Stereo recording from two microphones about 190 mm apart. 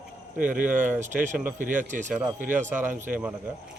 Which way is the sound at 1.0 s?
40° right (ahead or behind).